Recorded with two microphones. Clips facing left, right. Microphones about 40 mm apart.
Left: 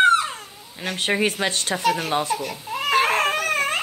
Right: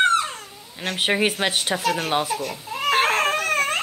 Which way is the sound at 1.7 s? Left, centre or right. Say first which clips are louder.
Left 1 dB; centre.